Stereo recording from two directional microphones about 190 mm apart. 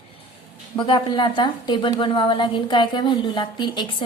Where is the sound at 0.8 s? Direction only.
25° left (ahead or behind).